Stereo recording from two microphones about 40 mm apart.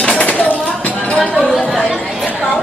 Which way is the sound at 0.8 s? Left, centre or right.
Left.